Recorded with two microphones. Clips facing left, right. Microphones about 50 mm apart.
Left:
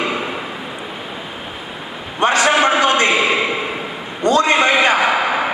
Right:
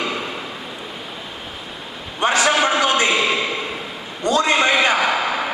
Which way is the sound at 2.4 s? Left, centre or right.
Centre.